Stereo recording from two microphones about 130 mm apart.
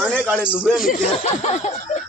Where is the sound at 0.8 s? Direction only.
90° left.